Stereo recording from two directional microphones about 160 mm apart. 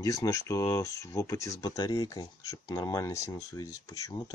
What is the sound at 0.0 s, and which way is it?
Speech, 20° left (ahead or behind).